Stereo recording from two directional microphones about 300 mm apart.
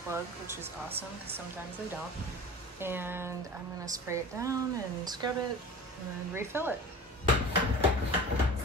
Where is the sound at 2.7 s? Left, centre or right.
Centre.